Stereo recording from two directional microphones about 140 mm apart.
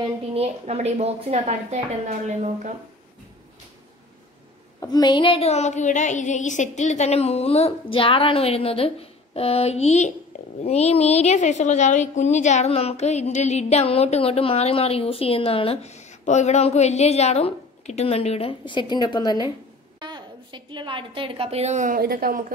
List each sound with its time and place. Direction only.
0.3 s a woman's voice: 50° right (ahead or behind)
4.7 s a woman's voice: 25° left (ahead or behind)
20.0 s a woman's voice: 30° right (ahead or behind); by 22.4 s 90° right